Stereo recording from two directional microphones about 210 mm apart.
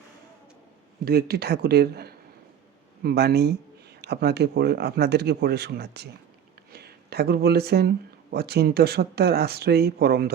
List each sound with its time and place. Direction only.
1.0 s speech: 50° right (ahead or behind)